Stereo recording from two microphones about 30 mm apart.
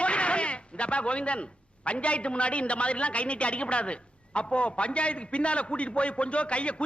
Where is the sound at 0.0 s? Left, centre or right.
Left.